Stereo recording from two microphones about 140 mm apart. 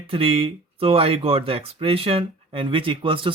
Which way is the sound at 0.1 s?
40° right (ahead or behind).